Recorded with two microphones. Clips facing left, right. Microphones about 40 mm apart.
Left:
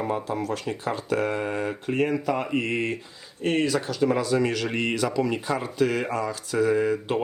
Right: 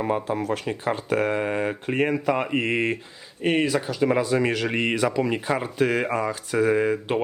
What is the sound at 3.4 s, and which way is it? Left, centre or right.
Speech, centre.